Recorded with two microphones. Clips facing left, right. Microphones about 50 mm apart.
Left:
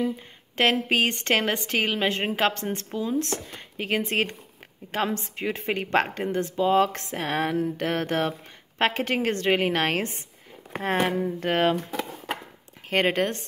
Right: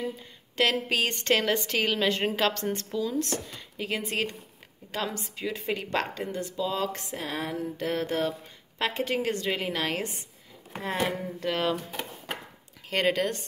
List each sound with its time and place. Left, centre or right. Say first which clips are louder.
0.6 s a woman's voice: left 3 dB; left
3.5 s a woman's voice: left 5 dB; left
12.9 s a woman's voice: left 3 dB; left